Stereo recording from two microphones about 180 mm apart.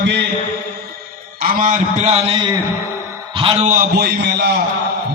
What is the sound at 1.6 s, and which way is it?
Speech, 45° right (ahead or behind).